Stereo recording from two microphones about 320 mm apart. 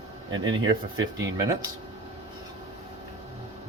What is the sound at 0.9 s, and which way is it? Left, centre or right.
Speech, centre.